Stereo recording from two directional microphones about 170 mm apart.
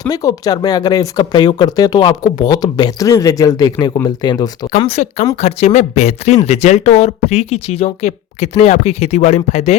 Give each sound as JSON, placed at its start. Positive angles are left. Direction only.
{"t": 0.1, "sound": "speech", "side_deg": 20}
{"t": 4.9, "sound": "speech", "side_deg": 40}